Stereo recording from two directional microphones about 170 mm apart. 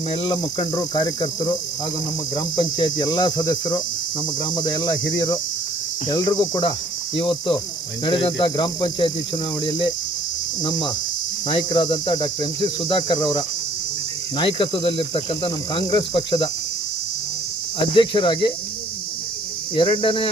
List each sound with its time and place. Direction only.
0.2 s speech: 25° left (ahead or behind)
7.2 s cricket: 30° left (ahead or behind)
8.0 s speech: 25° left (ahead or behind)
17.9 s speech: 30° left (ahead or behind)
19.7 s speech: 30° left (ahead or behind)